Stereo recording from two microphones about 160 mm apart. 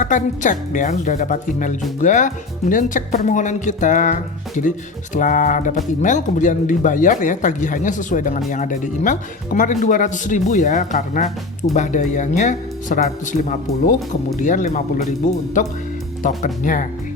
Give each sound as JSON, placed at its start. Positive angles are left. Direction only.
{"t": 0.0, "sound": "speech", "side_deg": 50}
{"t": 16.2, "sound": "speech", "side_deg": 55}